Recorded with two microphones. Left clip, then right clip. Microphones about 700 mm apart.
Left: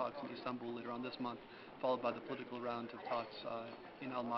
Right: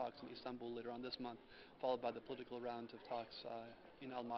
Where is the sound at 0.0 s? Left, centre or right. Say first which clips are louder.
Left 6 dB; right.